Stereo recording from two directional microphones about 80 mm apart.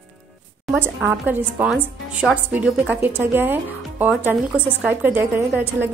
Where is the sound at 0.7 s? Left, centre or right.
Right.